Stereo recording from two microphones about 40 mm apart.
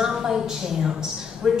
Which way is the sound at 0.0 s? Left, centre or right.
Centre.